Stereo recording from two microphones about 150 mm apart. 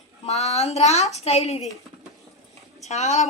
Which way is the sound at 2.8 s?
50° left (ahead or behind).